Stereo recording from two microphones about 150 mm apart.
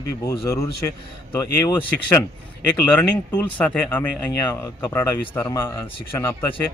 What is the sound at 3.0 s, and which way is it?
A man's voice, 10° left (ahead or behind).